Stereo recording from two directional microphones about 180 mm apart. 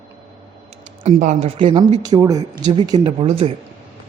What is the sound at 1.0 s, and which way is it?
Speech, 40° right (ahead or behind).